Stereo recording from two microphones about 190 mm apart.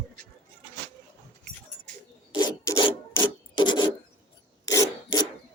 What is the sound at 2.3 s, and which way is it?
Filing, 20° left (ahead or behind).